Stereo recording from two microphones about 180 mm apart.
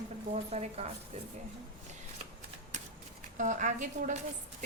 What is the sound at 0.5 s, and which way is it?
Speech, 35° right (ahead or behind).